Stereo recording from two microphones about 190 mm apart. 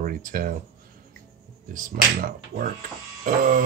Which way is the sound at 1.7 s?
45° right (ahead or behind).